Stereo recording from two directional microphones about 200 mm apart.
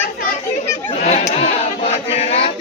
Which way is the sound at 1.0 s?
35° left (ahead or behind).